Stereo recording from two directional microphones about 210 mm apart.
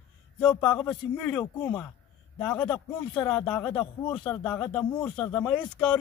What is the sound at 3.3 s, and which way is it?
Speech, 5° left (ahead or behind).